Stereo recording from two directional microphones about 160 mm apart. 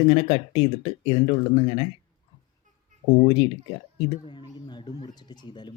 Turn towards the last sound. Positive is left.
turn(degrees=30)  # may be behind; listen again after turning